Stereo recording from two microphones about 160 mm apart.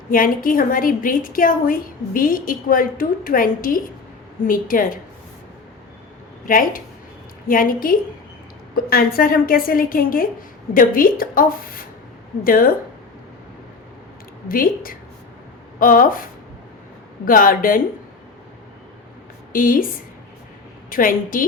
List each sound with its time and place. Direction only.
0.1 s a woman's voice: 60° left (ahead or behind)
6.4 s a woman's voice: 60° left (ahead or behind)
14.4 s a woman's voice: 60° left (ahead or behind)
17.2 s a woman's voice: 60° left (ahead or behind)
19.5 s a woman's voice: 60° left (ahead or behind)
20.9 s a woman's voice: 60° left (ahead or behind)